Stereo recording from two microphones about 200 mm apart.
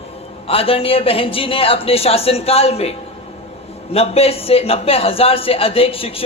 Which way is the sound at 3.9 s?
30° left (ahead or behind).